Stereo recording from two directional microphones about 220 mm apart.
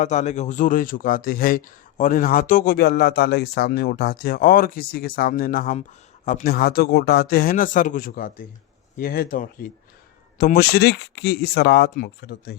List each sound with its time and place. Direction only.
0.0 s a man's voice: 30° left (ahead or behind)